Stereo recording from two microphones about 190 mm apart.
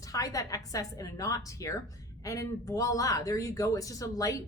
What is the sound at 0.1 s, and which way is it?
Speech, 20° left (ahead or behind).